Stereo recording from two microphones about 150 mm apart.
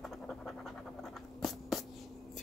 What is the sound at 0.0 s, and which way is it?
Scratch, centre (ahead or behind).